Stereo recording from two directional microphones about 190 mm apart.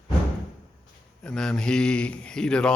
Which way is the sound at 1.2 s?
5° left (ahead or behind).